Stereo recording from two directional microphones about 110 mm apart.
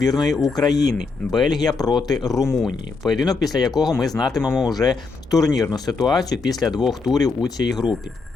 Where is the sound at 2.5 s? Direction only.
Centre (ahead or behind).